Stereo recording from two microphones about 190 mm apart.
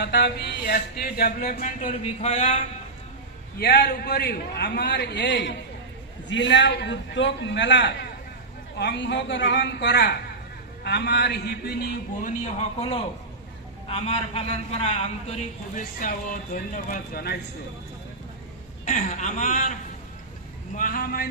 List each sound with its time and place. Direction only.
0.0 s speech: 60° left (ahead or behind); by 2.6 s 35° left (ahead or behind)
3.6 s a man's voice: 55° left (ahead or behind)
13.8 s a man's voice: 30° left (ahead or behind); by 17.3 s 50° left (ahead or behind)
18.9 s a man's voice: 40° left (ahead or behind)
20.7 s speech: 45° left (ahead or behind)